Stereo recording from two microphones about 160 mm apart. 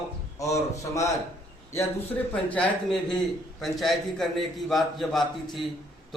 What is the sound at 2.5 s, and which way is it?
A man's voice, centre (ahead or behind).